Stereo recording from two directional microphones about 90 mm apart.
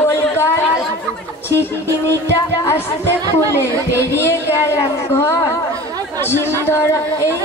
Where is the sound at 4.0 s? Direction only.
30° left (ahead or behind).